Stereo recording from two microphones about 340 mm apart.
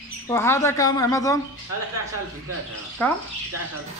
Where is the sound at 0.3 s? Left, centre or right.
Centre.